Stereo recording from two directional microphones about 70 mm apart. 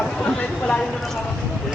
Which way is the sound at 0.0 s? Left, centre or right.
Centre.